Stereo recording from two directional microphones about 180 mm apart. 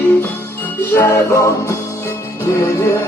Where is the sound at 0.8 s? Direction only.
15° left (ahead or behind).